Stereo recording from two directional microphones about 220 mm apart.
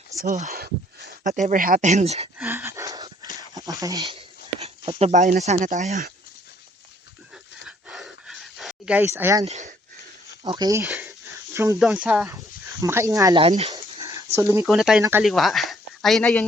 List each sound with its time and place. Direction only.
0.3 s speech: 35° right (ahead or behind)
2.4 s a sound: 10° right (ahead or behind)
3.5 s speech: 15° right (ahead or behind)
4.6 s speech: 30° right (ahead or behind)
7.9 s a sound: centre (ahead or behind)
9.5 s speech: 35° right (ahead or behind)
10.4 s speech: 20° right (ahead or behind)
10.8 s speech: 5° right (ahead or behind)
13.7 s dog: 20° right (ahead or behind)
14.3 s speech: 15° right (ahead or behind)
14.7 s speech: centre (ahead or behind)